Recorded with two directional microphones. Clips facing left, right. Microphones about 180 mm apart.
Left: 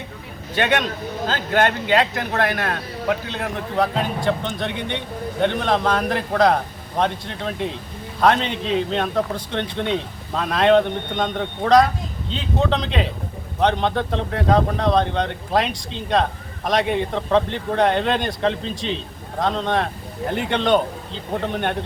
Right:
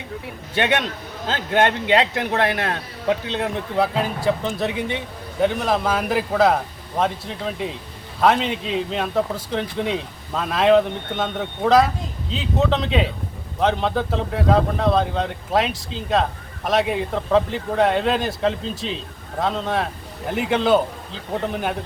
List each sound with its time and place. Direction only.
1.3 s speech: 25° right (ahead or behind)
3.8 s speech: 5° right (ahead or behind)